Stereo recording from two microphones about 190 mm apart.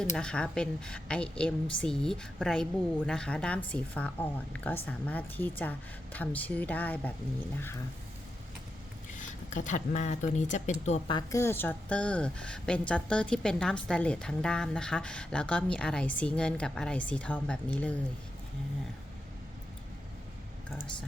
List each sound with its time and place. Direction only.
0.0 s a woman's voice: 5° left (ahead or behind)
9.1 s speech: 40° left (ahead or behind)
11.1 s a woman's voice: 15° left (ahead or behind)